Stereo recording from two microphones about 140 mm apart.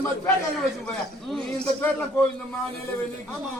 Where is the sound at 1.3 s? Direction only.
5° left (ahead or behind).